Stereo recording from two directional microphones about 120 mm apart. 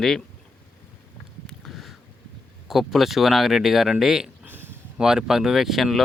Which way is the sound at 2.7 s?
Centre (ahead or behind).